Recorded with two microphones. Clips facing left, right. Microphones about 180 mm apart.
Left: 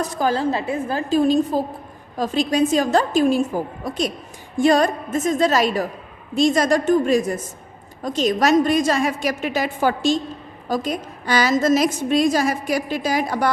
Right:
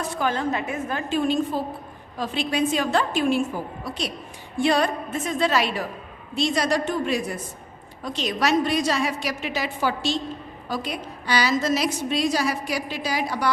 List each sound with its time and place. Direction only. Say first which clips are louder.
0.0 s a woman's voice: left 4 dB; 40° left (ahead or behind)